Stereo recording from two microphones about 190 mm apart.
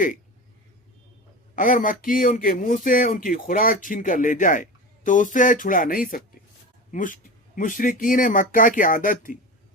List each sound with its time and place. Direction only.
1.5 s speech: 45° left (ahead or behind)